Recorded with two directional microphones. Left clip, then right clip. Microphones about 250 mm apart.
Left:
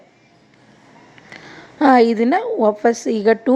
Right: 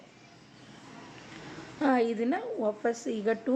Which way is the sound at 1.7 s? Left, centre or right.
Left.